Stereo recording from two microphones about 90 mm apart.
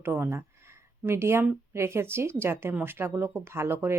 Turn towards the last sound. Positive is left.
turn(degrees=-30)  # may be behind; listen again after turning